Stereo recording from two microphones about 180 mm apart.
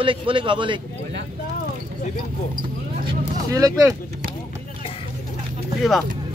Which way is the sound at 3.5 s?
20° right (ahead or behind).